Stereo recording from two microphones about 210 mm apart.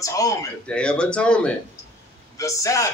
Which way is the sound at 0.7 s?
5° left (ahead or behind).